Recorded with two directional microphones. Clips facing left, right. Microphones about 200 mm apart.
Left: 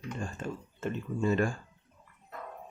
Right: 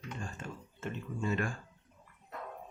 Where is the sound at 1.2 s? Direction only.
35° left (ahead or behind).